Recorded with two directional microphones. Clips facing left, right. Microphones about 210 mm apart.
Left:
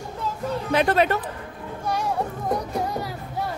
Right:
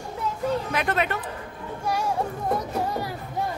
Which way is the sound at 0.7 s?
35° left (ahead or behind).